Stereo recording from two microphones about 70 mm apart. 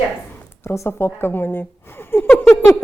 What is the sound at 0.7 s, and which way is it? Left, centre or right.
Speech, left.